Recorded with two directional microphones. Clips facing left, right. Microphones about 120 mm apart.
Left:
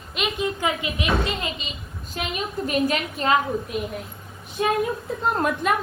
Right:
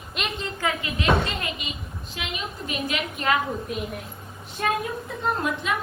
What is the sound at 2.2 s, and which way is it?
A woman's voice, 45° left (ahead or behind).